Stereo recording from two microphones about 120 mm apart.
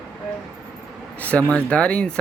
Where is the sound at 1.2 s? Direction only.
15° left (ahead or behind).